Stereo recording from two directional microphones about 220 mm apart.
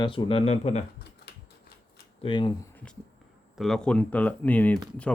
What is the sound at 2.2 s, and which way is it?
Speech, 20° left (ahead or behind).